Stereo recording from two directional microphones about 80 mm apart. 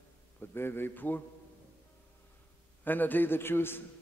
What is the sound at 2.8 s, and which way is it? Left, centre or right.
Speech, left.